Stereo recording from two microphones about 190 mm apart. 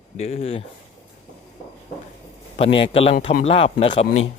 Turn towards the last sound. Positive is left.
turn(degrees=30)  # may be behind; listen again after turning